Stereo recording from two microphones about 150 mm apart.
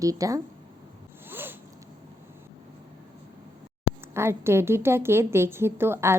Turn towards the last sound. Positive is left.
turn(degrees=-15)  # may be behind; listen again after turning